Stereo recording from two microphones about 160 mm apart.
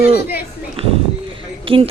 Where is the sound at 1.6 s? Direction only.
35° right (ahead or behind).